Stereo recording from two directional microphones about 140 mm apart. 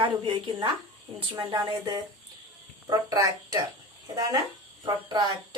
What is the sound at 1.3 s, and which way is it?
A woman's voice, 25° right (ahead or behind).